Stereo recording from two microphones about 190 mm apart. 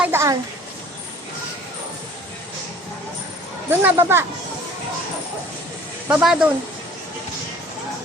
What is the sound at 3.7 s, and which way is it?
Speech, 10° right (ahead or behind).